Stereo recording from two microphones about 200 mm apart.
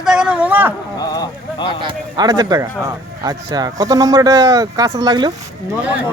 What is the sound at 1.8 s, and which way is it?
Speech, 20° right (ahead or behind).